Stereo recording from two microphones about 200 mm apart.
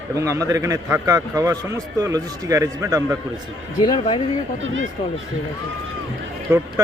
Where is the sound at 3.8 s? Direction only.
20° left (ahead or behind).